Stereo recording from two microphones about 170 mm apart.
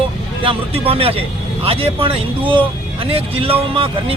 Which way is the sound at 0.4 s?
35° right (ahead or behind).